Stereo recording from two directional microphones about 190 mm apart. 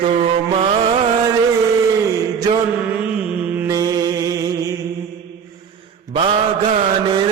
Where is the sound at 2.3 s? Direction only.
20° right (ahead or behind).